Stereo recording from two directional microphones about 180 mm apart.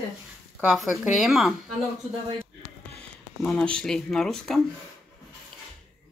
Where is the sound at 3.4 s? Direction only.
5° left (ahead or behind).